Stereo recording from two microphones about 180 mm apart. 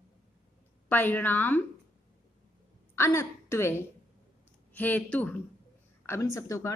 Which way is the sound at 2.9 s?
15° left (ahead or behind).